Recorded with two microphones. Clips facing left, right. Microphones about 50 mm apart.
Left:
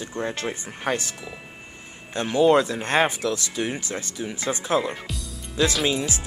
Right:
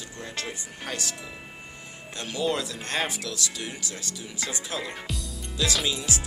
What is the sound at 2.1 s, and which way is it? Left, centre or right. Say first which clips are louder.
Speech: left 10 dB; left.